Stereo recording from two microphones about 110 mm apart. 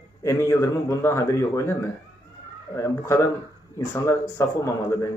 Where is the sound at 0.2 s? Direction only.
30° left (ahead or behind).